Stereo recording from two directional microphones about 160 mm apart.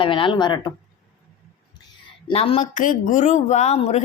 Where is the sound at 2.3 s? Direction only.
35° left (ahead or behind).